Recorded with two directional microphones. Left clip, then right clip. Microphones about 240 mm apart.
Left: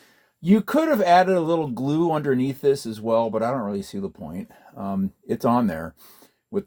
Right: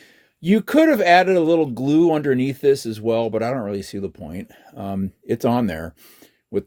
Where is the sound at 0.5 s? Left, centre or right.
Right.